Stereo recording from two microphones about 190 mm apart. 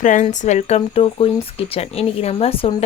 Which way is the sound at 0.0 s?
40° left (ahead or behind).